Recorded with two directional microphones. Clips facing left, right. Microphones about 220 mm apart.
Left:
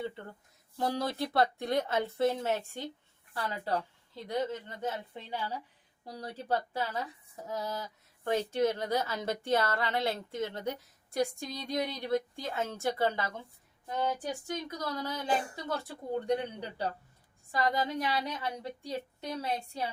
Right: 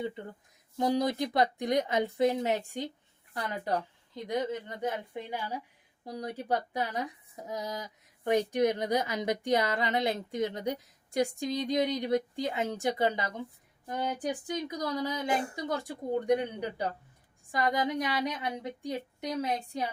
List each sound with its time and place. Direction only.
0.0 s speech: 15° right (ahead or behind)